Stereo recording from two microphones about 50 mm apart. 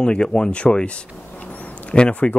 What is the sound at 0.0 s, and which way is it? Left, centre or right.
Speech, centre.